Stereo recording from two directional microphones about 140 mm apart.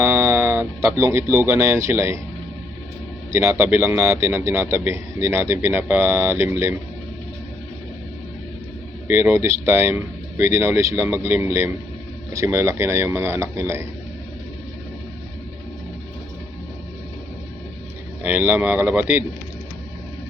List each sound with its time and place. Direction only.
0.0 s a sound: 15° right (ahead or behind)
3.3 s speech: 20° right (ahead or behind)
9.0 s speech: 15° right (ahead or behind)
18.2 s speech: 10° right (ahead or behind)